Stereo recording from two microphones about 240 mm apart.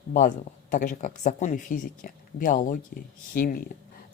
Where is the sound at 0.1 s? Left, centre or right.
Left.